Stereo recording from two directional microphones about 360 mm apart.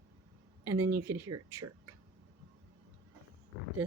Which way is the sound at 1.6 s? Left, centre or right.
Right.